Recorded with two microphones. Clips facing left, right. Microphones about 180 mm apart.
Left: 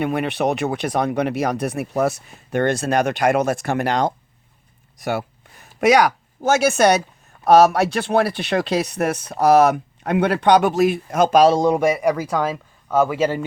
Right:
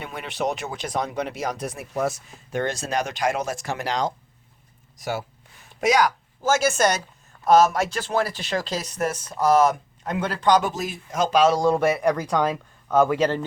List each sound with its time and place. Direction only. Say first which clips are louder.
0.0 s speech: left 8 dB; 65° left (ahead or behind)
11.5 s speech: left 3 dB; 20° left (ahead or behind)